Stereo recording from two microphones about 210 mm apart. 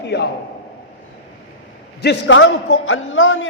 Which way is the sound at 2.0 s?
60° left (ahead or behind).